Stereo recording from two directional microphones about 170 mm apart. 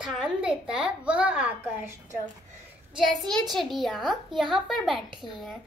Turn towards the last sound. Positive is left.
turn(degrees=0)  # may be behind; listen again after turning